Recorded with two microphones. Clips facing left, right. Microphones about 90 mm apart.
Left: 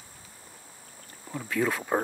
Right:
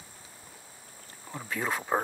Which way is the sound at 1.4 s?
30° right (ahead or behind).